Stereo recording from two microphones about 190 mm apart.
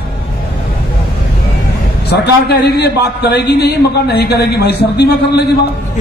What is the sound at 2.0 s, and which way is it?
A man's voice, 60° left (ahead or behind).